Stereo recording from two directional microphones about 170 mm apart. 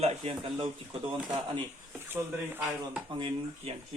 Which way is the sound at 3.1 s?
30° right (ahead or behind).